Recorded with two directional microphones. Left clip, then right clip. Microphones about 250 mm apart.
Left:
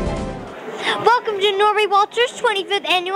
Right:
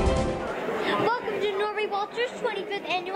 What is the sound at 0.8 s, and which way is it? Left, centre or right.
A woman's voice, left.